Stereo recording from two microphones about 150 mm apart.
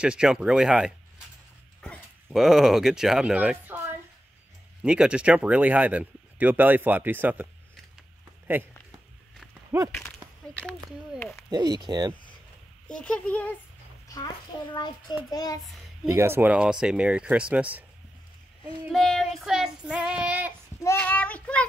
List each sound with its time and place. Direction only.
0.0 s child singing: 5° right (ahead or behind)
1.8 s speech: 5° left (ahead or behind); by 7.4 s 10° right (ahead or behind)
9.7 s speech: 15° right (ahead or behind)
11.5 s speech: 30° right (ahead or behind)
12.8 s a child's voice: 5° left (ahead or behind)
14.0 s a child's voice: 25° left (ahead or behind)
16.1 s speech: 15° right (ahead or behind)
18.9 s child singing: centre (ahead or behind)
20.8 s a child's voice: 15° left (ahead or behind)